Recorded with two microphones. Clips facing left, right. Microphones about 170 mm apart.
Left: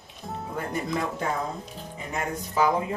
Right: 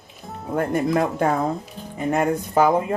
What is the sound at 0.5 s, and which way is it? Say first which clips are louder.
Speech: right 10 dB; 55° right (ahead or behind).